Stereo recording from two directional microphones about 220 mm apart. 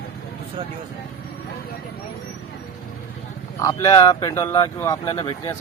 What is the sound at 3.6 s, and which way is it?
Speech, 15° left (ahead or behind).